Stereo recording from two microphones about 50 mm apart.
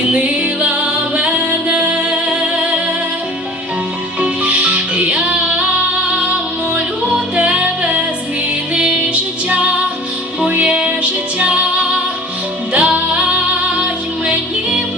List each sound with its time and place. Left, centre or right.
0.0 s music: right
4.2 s music: right
7.3 s music: right
10.6 s music: right